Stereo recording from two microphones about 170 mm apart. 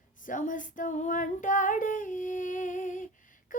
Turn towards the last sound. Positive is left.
turn(degrees=50)  # may be behind; listen again after turning